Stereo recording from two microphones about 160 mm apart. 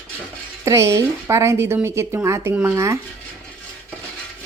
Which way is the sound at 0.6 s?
20° right (ahead or behind).